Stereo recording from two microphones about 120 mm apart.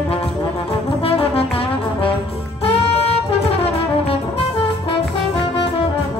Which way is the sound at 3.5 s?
55° left (ahead or behind).